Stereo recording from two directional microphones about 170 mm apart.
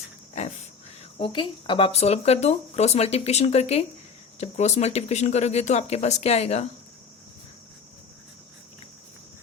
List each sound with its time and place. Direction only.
1.2 s speech: 30° left (ahead or behind)